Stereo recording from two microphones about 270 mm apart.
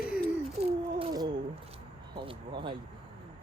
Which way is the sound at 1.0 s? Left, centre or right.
Centre.